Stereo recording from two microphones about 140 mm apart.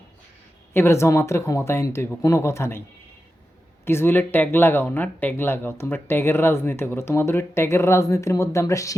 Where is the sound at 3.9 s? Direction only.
15° left (ahead or behind).